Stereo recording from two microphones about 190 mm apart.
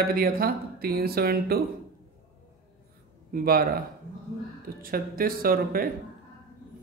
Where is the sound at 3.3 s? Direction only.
50° right (ahead or behind).